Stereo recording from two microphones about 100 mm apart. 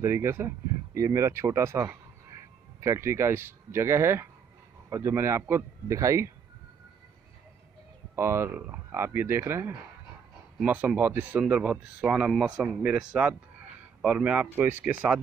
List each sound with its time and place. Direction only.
0.0 s speech: 25° right (ahead or behind)
8.2 s speech: 25° right (ahead or behind)
10.6 s speech: 10° right (ahead or behind)